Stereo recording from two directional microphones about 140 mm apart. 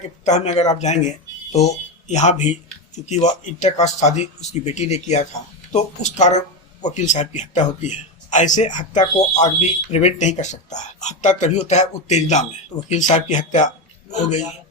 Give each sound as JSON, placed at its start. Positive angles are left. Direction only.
{"t": 0.3, "sound": "speech", "side_deg": 55}